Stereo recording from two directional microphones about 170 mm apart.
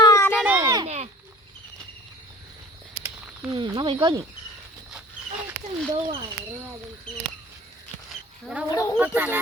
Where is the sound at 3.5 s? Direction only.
30° right (ahead or behind).